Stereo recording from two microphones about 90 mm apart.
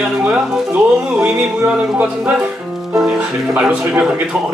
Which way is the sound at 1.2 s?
15° right (ahead or behind).